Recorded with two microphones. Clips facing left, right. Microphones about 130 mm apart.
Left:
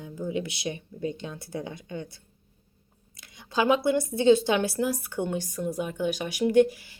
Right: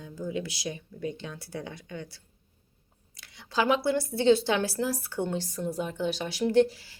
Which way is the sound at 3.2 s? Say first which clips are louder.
Left 2 dB; 20° left (ahead or behind).